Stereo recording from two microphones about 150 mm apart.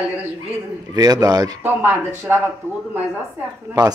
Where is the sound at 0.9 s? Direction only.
25° right (ahead or behind).